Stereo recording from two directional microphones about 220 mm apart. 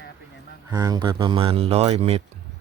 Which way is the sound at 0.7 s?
15° right (ahead or behind).